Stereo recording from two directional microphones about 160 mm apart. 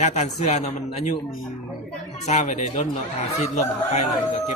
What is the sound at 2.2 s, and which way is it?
A man's voice, 45° left (ahead or behind).